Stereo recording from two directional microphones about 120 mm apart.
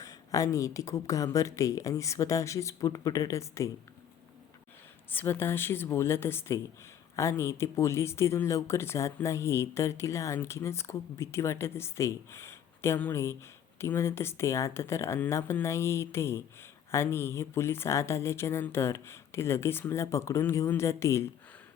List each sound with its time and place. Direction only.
0.0 s speech: 30° left (ahead or behind)
5.1 s speech: 20° left (ahead or behind)